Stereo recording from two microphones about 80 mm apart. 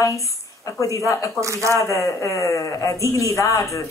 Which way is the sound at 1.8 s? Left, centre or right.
Left.